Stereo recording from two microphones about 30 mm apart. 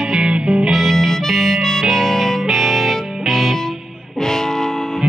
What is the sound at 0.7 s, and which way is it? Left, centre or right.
Music, centre.